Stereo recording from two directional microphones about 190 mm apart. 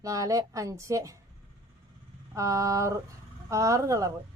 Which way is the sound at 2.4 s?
15° right (ahead or behind).